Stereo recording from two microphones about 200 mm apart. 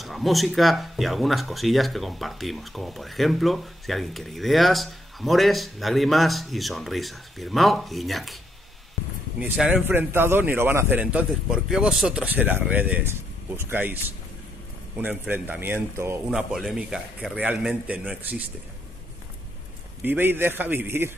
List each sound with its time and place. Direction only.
0.0 s speech: centre (ahead or behind)
9.4 s a man's voice: 5° right (ahead or behind)
15.0 s a man's voice: 10° right (ahead or behind)
20.0 s a man's voice: 10° right (ahead or behind)